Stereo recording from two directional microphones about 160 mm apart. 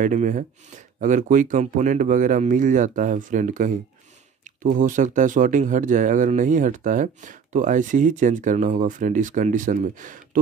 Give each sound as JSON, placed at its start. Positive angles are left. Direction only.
{"t": 0.0, "sound": "speech", "side_deg": -50}